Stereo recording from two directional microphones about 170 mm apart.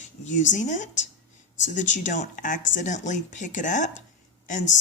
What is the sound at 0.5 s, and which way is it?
Speech, 45° left (ahead or behind).